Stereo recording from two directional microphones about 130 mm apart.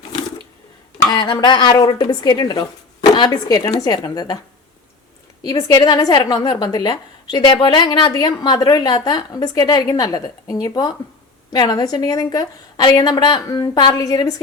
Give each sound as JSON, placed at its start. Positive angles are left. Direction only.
{"t": 1.0, "sound": "a woman's voice", "side_deg": 35}
{"t": 5.4, "sound": "a woman's voice", "side_deg": 30}